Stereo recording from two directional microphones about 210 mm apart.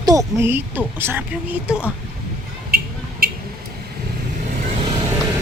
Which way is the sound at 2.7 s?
45° right (ahead or behind).